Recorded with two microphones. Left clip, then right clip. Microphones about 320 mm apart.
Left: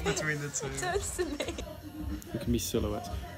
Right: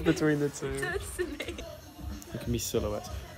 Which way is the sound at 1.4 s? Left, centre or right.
Left.